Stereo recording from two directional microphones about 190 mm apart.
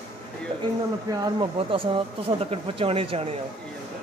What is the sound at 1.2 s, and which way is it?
A man's voice, 25° right (ahead or behind).